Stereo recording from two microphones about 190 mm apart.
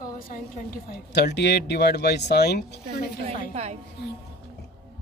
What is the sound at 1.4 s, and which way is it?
A man's voice, 60° left (ahead or behind).